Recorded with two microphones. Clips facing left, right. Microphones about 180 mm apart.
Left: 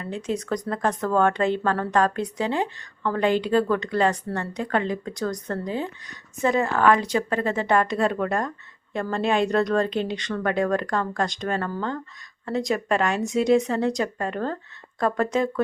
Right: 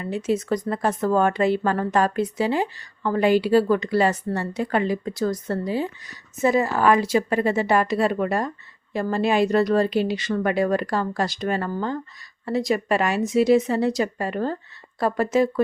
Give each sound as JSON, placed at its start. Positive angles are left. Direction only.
{"t": 0.0, "sound": "speech", "side_deg": -5}